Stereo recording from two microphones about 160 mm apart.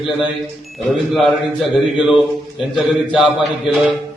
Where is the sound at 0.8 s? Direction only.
Centre (ahead or behind).